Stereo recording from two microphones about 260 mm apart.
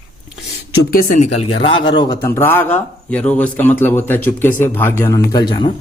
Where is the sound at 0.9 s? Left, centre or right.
Left.